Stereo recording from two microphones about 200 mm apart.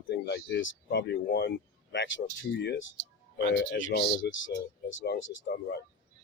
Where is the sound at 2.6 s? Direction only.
60° left (ahead or behind).